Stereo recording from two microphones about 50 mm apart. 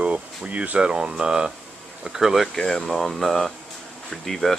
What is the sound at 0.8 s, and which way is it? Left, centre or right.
Speech, centre.